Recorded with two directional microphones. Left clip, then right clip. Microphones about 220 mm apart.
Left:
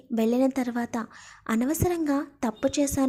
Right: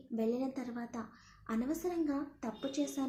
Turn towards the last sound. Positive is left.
turn(degrees=45)  # may be behind; listen again after turning